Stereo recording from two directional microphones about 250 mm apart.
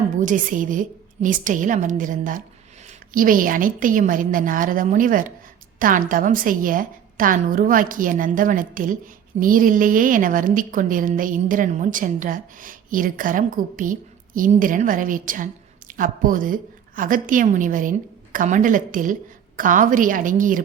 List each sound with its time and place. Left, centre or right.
0.2 s a woman's voice: right